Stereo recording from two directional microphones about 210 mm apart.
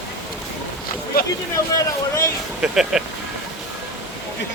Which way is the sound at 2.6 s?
Centre (ahead or behind).